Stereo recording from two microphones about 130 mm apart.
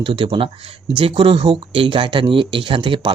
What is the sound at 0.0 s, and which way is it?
Speech, 40° right (ahead or behind).